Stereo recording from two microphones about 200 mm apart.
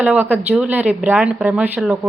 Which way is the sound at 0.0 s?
10° right (ahead or behind).